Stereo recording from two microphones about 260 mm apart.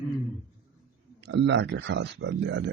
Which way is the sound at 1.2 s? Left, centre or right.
Right.